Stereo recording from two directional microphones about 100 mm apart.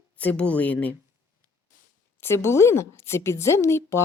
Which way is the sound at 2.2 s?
25° left (ahead or behind).